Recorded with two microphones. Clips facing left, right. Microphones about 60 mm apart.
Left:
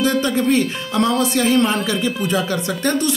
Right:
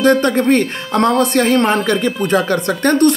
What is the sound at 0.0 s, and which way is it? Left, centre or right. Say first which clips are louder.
A woman's voice: right 5 dB; right.